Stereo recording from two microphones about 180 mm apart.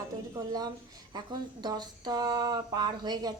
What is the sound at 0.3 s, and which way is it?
Speech, 20° right (ahead or behind).